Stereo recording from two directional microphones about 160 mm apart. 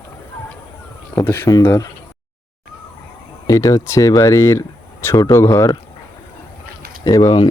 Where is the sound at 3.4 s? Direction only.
20° left (ahead or behind).